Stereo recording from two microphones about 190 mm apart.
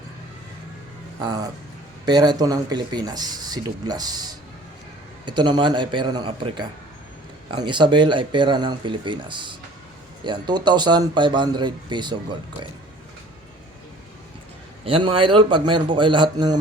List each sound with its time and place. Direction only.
2.0 s speech: 20° right (ahead or behind)
14.8 s speech: 25° right (ahead or behind)